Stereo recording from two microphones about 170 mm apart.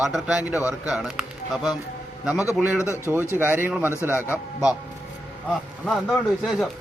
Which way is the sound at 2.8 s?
15° left (ahead or behind).